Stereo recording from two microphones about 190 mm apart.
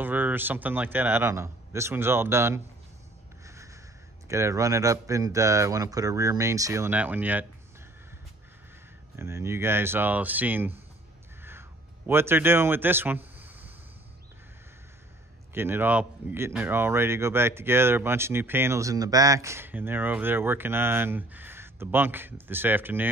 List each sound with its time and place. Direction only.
0.0 s speech: 10° right (ahead or behind)
3.4 s snort: 15° right (ahead or behind)
4.3 s speech: 15° right (ahead or behind)
9.1 s speech: 15° right (ahead or behind)
12.1 s speech: 10° right (ahead or behind)
15.5 s speech: 10° right (ahead or behind)